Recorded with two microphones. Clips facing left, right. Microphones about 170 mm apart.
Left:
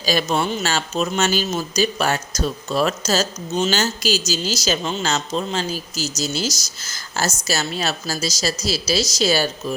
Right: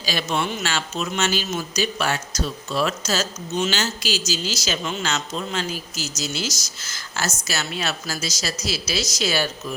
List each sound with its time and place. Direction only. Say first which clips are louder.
0.0 s speech: left 4 dB; 45° left (ahead or behind)